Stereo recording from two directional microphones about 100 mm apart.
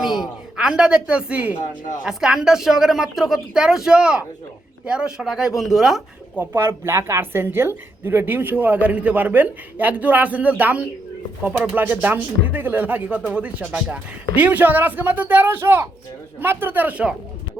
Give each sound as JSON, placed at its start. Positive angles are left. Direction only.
{"t": 0.0, "sound": "a woman's voice", "side_deg": -5}
{"t": 6.4, "sound": "a woman's voice", "side_deg": -25}